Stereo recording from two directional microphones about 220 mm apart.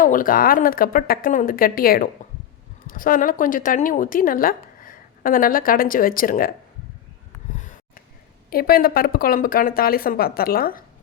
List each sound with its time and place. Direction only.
0.0 s a woman's voice: 40° left (ahead or behind)
7.5 s a sound: 35° left (ahead or behind)
8.4 s a woman's voice: 40° left (ahead or behind)